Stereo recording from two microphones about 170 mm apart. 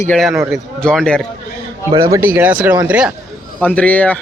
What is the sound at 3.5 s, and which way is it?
Speech, 5° left (ahead or behind).